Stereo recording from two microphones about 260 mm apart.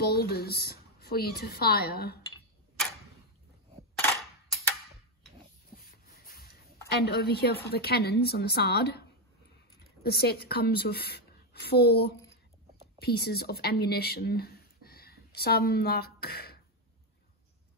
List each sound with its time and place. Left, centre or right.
0.0 s a woman's voice: left
5.8 s a sound: left
6.9 s a woman's voice: left
10.0 s a woman's voice: left